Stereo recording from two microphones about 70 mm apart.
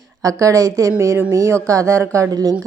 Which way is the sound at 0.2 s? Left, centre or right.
Right.